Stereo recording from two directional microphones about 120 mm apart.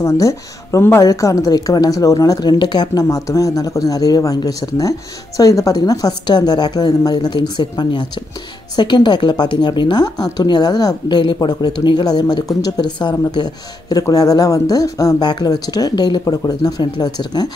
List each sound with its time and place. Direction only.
0.0 s speech: 25° left (ahead or behind)